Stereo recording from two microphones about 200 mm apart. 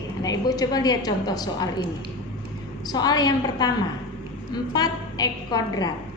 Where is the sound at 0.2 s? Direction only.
20° left (ahead or behind).